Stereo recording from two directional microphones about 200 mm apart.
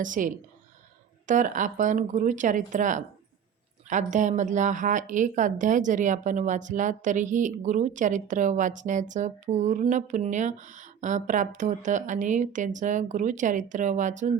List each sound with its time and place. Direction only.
0.0 s a woman's voice: 40° right (ahead or behind)